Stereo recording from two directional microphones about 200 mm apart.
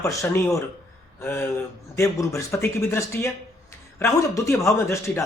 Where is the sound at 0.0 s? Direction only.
15° left (ahead or behind).